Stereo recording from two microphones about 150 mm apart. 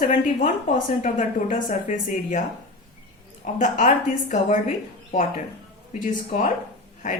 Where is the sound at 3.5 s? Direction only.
60° left (ahead or behind).